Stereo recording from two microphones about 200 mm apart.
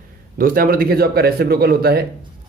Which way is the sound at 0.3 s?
45° right (ahead or behind).